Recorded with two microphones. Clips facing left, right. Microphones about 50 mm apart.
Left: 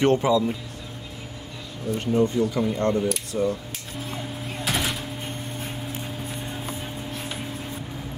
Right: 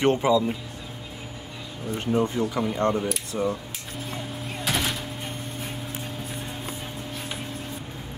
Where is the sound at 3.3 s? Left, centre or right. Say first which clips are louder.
Left 2 dB; right.